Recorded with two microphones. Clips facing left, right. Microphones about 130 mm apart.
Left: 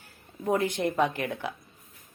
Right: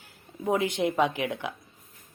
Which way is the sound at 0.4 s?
5° right (ahead or behind).